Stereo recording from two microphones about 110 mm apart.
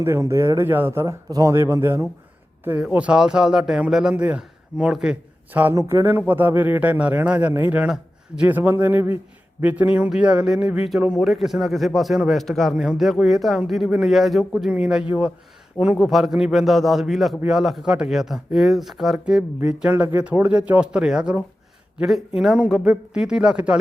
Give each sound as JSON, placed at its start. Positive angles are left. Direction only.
{"t": 0.0, "sound": "speech", "side_deg": -25}
{"t": 1.3, "sound": "speech", "side_deg": -35}
{"t": 2.9, "sound": "speech", "side_deg": -10}
{"t": 5.7, "sound": "speech", "side_deg": -30}
{"t": 6.1, "sound": "speech", "side_deg": -15}